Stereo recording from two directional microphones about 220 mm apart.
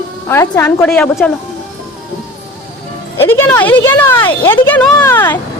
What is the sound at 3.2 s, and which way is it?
Speech, 10° left (ahead or behind).